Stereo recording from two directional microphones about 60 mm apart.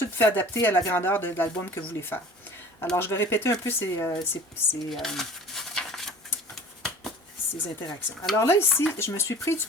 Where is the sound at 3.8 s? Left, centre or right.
Left.